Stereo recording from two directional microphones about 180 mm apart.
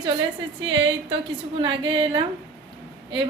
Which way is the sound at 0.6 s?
90° right.